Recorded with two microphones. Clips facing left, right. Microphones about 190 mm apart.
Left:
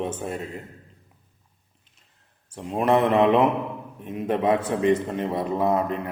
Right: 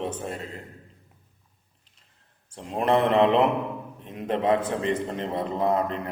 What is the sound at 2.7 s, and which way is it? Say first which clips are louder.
A man's voice: left 1 dB; 10° left (ahead or behind).